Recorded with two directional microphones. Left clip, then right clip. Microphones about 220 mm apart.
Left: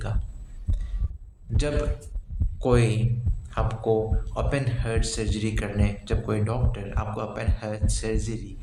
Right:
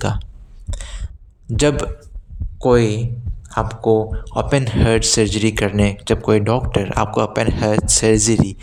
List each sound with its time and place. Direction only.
0.7 s heart sounds: 45° right (ahead or behind)
1.5 s a man's voice: 45° right (ahead or behind)